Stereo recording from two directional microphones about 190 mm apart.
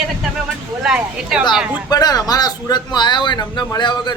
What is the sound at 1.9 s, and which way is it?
A man's voice, 20° left (ahead or behind).